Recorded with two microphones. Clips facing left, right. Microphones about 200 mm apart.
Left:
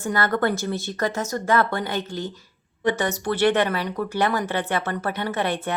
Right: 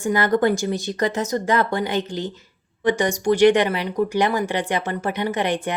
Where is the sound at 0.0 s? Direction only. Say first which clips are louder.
Right 4 dB; 15° right (ahead or behind).